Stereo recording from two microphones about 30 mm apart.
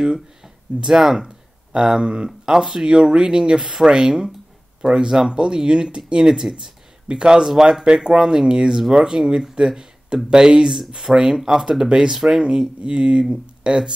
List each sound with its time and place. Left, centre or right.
0.9 s speech: centre
3.0 s speech: right
7.4 s speech: centre
7.8 s speech: right
8.2 s speech: centre
9.6 s speech: right
10.1 s speech: right